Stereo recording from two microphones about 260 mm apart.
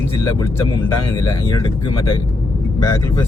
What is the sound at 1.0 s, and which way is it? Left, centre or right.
Speech, centre.